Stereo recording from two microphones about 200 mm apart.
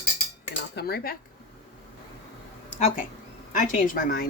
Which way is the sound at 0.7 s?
50° left (ahead or behind).